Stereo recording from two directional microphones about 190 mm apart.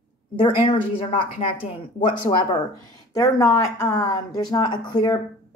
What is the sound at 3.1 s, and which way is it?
Speech, 20° left (ahead or behind).